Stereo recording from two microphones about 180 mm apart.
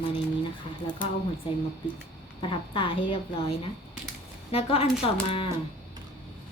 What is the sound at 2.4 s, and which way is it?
Speech, 30° left (ahead or behind).